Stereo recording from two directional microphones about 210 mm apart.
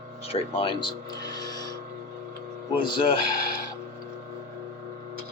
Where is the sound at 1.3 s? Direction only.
20° left (ahead or behind).